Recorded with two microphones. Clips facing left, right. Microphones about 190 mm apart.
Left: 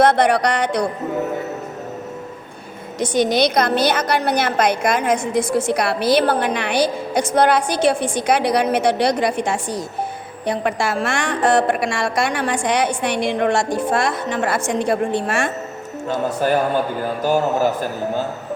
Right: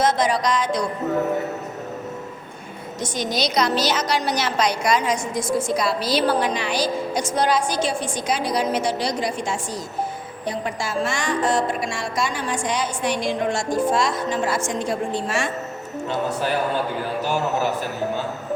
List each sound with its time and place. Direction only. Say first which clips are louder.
0.0 s a woman's voice: left 5 dB; 65° left (ahead or behind)
3.0 s a woman's voice: left 8 dB; 65° left (ahead or behind)
16.0 s speech: left 5 dB; 45° left (ahead or behind)